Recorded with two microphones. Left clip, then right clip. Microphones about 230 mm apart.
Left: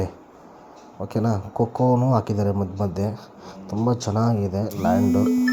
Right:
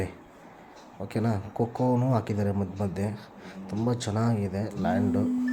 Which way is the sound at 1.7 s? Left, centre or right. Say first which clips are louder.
Left 7 dB; centre.